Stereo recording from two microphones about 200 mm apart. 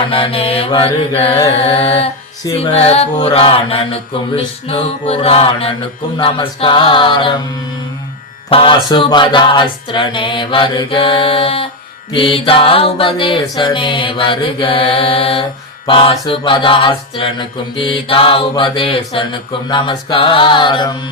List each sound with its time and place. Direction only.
0.1 s music: 30° left (ahead or behind)
8.4 s music: 25° left (ahead or behind)